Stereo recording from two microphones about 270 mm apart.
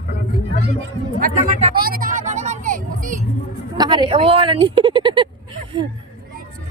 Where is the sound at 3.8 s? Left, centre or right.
Centre.